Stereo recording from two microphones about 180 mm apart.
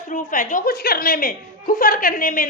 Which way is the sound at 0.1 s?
50° left (ahead or behind).